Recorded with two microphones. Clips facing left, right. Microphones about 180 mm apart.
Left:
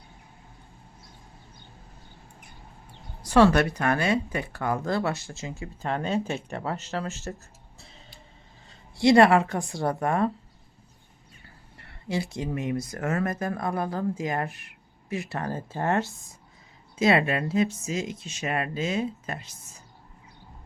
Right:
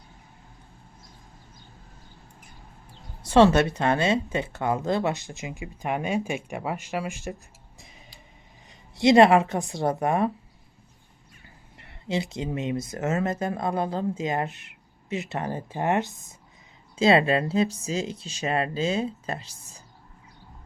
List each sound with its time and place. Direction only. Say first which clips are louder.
3.2 s speech: right 1 dB; 25° right (ahead or behind)
7.8 s music: even; 15° right (ahead or behind)
9.0 s a woman's voice: right 1 dB; 20° right (ahead or behind)
11.4 s speech: right 1 dB; 20° right (ahead or behind)
17.0 s speech: right 3 dB; 30° right (ahead or behind)